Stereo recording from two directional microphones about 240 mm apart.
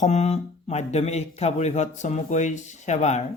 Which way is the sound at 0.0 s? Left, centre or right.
Left.